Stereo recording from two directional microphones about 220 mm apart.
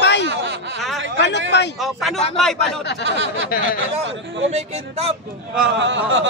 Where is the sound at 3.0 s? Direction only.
55° right (ahead or behind).